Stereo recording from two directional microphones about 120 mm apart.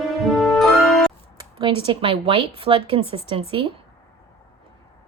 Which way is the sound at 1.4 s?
45° right (ahead or behind).